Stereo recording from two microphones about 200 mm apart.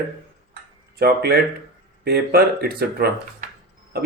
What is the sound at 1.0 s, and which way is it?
A man's voice, 50° right (ahead or behind).